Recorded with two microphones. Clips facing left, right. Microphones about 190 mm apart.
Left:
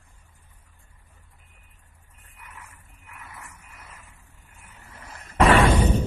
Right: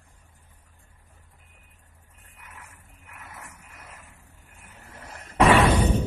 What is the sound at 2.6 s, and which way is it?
Boat, 40° right (ahead or behind).